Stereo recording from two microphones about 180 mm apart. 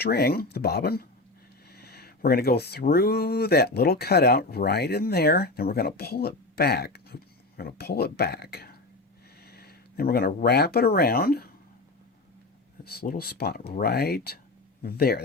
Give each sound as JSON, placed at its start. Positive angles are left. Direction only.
{"t": 0.0, "sound": "speech", "side_deg": 60}
{"t": 12.8, "sound": "a man's voice", "side_deg": 60}